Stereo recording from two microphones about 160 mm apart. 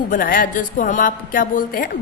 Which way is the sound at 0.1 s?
60° left (ahead or behind).